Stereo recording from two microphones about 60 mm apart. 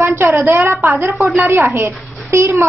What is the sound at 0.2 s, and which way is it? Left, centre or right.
A woman's voice, right.